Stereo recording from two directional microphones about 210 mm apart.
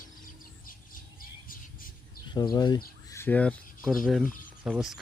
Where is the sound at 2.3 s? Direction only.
20° left (ahead or behind).